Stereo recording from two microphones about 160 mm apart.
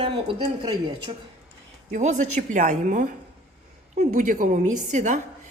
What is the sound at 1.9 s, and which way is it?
A woman's voice, 45° right (ahead or behind).